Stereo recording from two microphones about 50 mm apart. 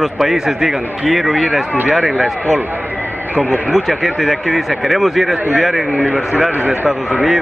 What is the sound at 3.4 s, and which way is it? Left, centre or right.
Speech, left.